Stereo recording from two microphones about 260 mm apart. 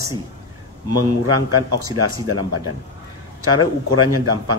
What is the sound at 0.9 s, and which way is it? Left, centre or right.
Speech, right.